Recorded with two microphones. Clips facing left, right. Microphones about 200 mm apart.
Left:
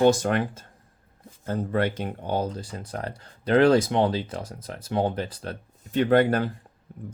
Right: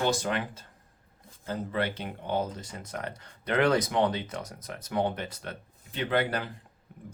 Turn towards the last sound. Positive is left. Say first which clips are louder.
# left 8 dB
turn(degrees=45)  # may be behind; listen again after turning